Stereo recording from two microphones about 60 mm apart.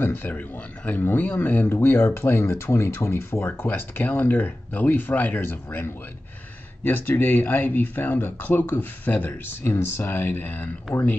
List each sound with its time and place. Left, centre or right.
0.0 s speech: left
3.6 s speech: left